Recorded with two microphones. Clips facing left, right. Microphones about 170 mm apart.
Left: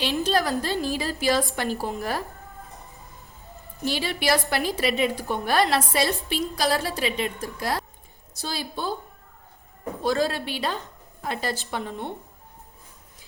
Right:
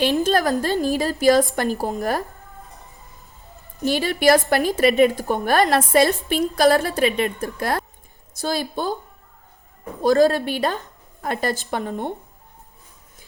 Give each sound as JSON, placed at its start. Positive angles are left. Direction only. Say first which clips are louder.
{"t": 0.0, "sound": "a woman's voice", "louder": "right 5 dB", "side_deg": -45}
{"t": 3.8, "sound": "a woman's voice", "louder": "right 7 dB", "side_deg": -50}
{"t": 10.0, "sound": "a woman's voice", "louder": "right 8 dB", "side_deg": -45}